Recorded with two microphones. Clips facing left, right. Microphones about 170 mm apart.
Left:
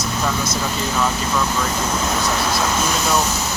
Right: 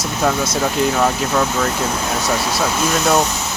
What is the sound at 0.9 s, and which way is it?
Speech, 55° right (ahead or behind).